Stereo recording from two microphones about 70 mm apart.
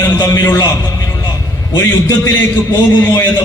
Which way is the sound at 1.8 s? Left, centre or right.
Left.